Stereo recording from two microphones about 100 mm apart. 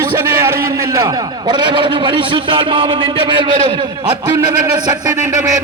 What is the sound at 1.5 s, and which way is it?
A man's voice, 50° right (ahead or behind).